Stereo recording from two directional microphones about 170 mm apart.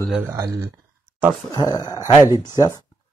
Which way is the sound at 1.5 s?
20° left (ahead or behind).